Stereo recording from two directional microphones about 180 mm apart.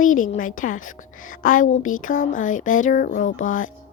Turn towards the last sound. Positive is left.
turn(degrees=45)  # may be behind; listen again after turning